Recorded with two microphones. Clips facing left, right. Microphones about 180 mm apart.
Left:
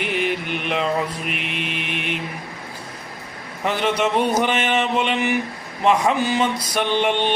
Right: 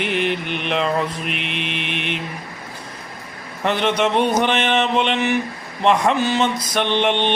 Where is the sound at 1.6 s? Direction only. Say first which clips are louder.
Right 1 dB; 5° left (ahead or behind).